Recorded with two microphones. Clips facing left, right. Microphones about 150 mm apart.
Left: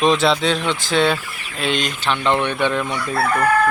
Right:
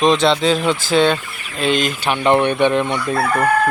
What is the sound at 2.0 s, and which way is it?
Speech, 15° right (ahead or behind).